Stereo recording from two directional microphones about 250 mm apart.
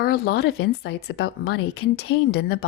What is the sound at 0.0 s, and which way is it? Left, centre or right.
Speech, left.